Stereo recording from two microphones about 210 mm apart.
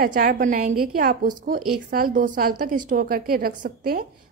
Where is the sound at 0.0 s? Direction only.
40° right (ahead or behind).